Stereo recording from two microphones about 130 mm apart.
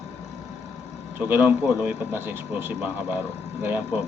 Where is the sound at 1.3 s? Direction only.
15° right (ahead or behind).